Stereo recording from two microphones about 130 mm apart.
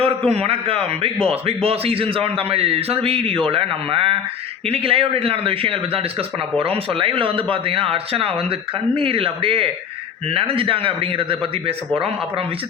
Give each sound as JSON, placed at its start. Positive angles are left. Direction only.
{"t": 0.0, "sound": "a man's voice", "side_deg": -50}